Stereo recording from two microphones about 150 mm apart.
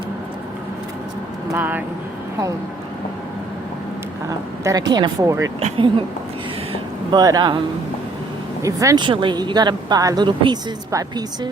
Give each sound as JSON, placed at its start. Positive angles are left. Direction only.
{"t": 1.5, "sound": "speech", "side_deg": -10}
{"t": 4.3, "sound": "a woman's voice", "side_deg": -25}
{"t": 5.5, "sound": "speech", "side_deg": -40}
{"t": 7.1, "sound": "a woman's voice", "side_deg": -25}
{"t": 8.6, "sound": "a woman's voice", "side_deg": -20}